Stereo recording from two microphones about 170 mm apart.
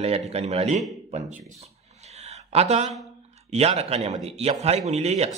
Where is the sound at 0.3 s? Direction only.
40° right (ahead or behind).